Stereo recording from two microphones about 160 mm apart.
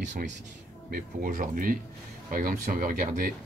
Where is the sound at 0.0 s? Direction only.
50° right (ahead or behind).